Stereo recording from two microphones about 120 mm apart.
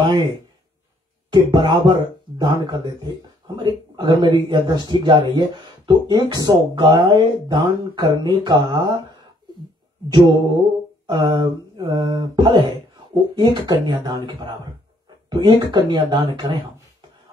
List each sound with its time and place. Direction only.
1.3 s speech: 40° right (ahead or behind)
11.1 s speech: 40° right (ahead or behind)